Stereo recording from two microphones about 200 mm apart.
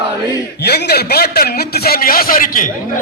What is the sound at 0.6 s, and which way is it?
A man's voice, 55° left (ahead or behind).